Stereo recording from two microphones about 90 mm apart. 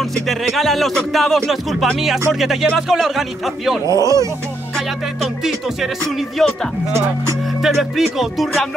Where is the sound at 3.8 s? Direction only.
35° right (ahead or behind).